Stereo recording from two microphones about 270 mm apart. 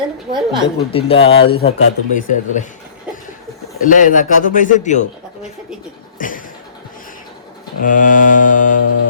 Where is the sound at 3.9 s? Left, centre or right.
Left.